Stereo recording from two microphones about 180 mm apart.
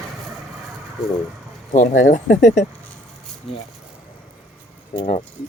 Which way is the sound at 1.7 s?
55° left (ahead or behind).